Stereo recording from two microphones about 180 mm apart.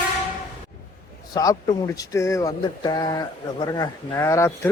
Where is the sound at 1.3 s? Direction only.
20° left (ahead or behind).